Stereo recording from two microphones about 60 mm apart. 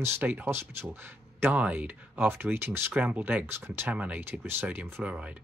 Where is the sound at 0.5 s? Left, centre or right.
Right.